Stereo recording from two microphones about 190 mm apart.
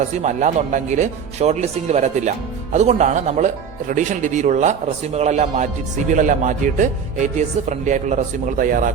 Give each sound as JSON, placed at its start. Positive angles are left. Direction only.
{"t": 0.2, "sound": "speech", "side_deg": -40}